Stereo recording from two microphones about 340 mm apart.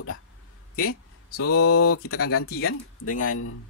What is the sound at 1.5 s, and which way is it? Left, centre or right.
Speech, left.